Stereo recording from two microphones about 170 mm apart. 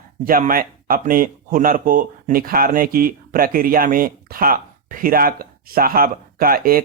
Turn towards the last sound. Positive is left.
turn(degrees=-60)  # may be behind; listen again after turning